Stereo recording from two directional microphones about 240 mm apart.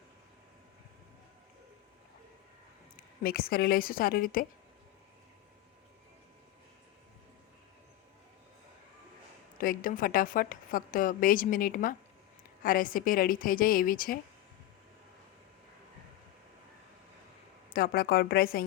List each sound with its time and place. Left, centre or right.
2.9 s speech: left
9.6 s a woman's voice: left
17.7 s a woman's voice: left